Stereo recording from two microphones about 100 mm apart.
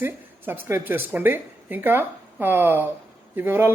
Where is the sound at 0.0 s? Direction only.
20° right (ahead or behind).